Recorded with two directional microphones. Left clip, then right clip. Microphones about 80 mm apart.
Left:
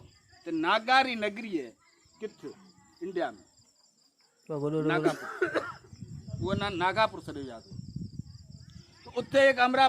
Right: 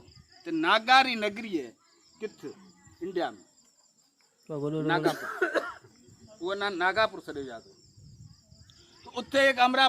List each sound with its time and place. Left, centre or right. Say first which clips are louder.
0.4 s a man's voice: right 3 dB; right
3.0 s speech: right 1 dB; right
4.4 s speech: left 1 dB; centre
4.9 s a man's voice: right 3 dB; right
6.4 s speech: right 1 dB; centre
6.7 s speech: even; left
8.6 s a sound: right 2 dB; centre